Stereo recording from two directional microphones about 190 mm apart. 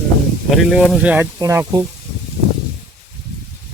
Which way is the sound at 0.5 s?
Centre (ahead or behind).